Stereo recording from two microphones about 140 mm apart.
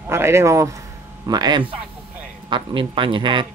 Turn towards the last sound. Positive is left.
turn(degrees=-35)  # may be behind; listen again after turning